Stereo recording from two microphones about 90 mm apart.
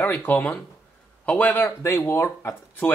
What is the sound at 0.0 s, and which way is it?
Speech, 25° left (ahead or behind).